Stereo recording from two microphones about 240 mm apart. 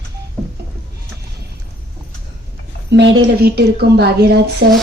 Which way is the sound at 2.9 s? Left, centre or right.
Right.